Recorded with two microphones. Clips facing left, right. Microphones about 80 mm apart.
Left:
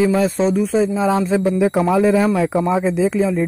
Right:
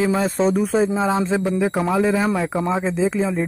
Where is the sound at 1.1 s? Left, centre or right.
Right.